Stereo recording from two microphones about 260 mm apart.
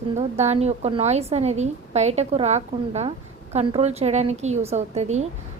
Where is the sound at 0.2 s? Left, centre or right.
Right.